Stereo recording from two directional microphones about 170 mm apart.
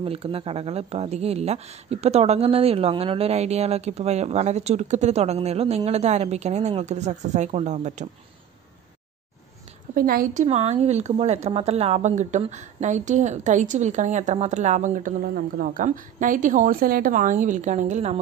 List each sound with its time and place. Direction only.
0.0 s speech: 35° right (ahead or behind)
9.9 s speech: 55° right (ahead or behind); by 18.2 s 40° right (ahead or behind)